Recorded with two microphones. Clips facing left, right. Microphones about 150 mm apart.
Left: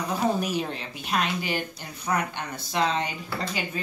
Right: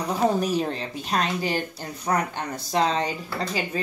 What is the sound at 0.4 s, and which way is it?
A woman's voice, 35° right (ahead or behind).